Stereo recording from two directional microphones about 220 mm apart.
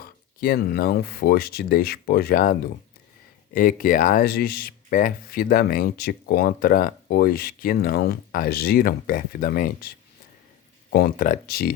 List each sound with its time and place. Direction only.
0.0 s speech: 40° left (ahead or behind)
10.9 s speech: 40° left (ahead or behind)